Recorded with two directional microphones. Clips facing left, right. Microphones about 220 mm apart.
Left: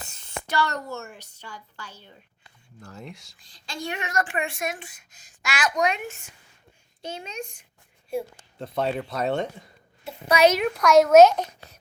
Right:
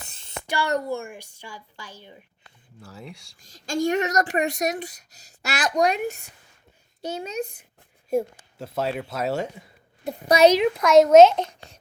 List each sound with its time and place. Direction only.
0.4 s a woman's voice: 10° right (ahead or behind)
2.8 s a man's voice: centre (ahead or behind)
3.3 s speech: 45° right (ahead or behind)
7.2 s speech: 35° right (ahead or behind)
8.5 s a man's voice: 5° right (ahead or behind)
10.0 s speech: 35° right (ahead or behind); by 11.1 s 20° right (ahead or behind)
11.1 s a child's voice: 10° left (ahead or behind)